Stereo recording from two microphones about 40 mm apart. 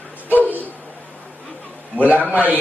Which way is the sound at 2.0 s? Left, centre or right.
Right.